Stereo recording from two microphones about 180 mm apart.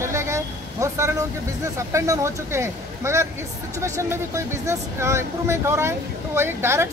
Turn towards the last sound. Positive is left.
turn(degrees=-15)  # may be behind; listen again after turning